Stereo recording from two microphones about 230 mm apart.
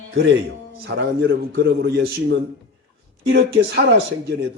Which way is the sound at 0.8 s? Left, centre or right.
Right.